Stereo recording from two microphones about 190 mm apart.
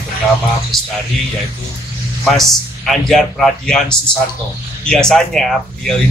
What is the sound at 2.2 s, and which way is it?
A man's voice, centre (ahead or behind).